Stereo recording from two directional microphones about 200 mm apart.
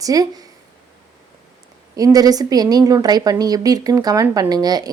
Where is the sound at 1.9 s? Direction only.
20° right (ahead or behind).